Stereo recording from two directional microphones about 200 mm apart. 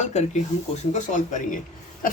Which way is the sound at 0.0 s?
35° left (ahead or behind).